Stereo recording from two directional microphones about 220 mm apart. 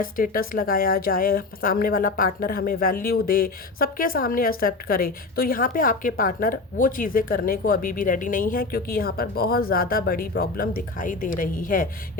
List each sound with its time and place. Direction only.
0.0 s a woman's voice: 40° left (ahead or behind)